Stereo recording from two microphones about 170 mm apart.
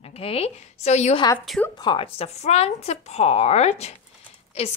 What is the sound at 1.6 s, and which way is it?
A woman's voice, 25° left (ahead or behind).